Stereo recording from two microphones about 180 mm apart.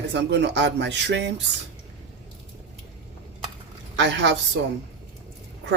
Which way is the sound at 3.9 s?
80° right.